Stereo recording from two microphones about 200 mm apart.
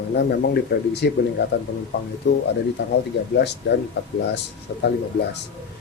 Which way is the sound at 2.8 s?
55° left (ahead or behind).